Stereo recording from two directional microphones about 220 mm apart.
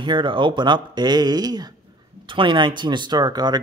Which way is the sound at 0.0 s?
20° right (ahead or behind).